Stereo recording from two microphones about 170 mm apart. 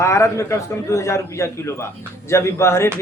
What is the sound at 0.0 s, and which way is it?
A man's voice, 15° left (ahead or behind).